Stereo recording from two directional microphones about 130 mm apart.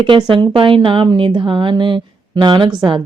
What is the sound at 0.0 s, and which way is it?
Speech, 40° right (ahead or behind).